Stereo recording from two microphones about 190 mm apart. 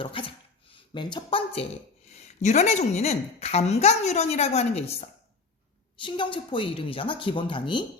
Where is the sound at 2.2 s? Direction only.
35° left (ahead or behind).